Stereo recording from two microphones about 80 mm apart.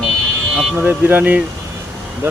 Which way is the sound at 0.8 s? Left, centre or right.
Right.